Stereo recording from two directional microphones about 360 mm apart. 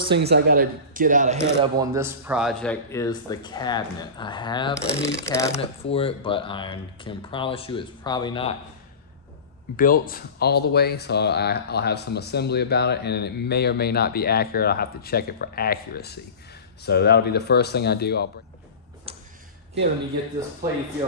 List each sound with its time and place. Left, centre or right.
0.1 s speech: right
1.6 s speech: centre
9.8 s speech: left
19.1 s a sound: centre